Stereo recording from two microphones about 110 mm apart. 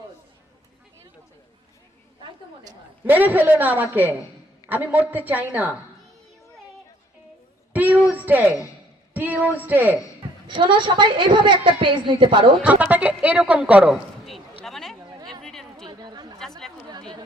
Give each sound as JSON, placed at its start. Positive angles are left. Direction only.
{"t": 3.0, "sound": "speech", "side_deg": -15}
{"t": 7.7, "sound": "a sound", "side_deg": -15}
{"t": 9.1, "sound": "speech", "side_deg": -15}
{"t": 10.4, "sound": "a woman's voice", "side_deg": -50}
{"t": 12.6, "sound": "speech", "side_deg": -15}
{"t": 14.6, "sound": "a sound", "side_deg": 5}
{"t": 15.4, "sound": "chatter", "side_deg": 5}
{"t": 15.9, "sound": "chatter", "side_deg": -40}
{"t": 16.4, "sound": "chatter", "side_deg": 5}